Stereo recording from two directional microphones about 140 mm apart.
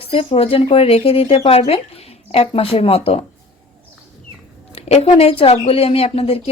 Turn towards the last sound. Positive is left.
turn(degrees=45)  # may be behind; listen again after turning